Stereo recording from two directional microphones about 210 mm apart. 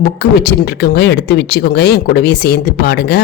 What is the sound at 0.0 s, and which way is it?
Speech, 50° left (ahead or behind).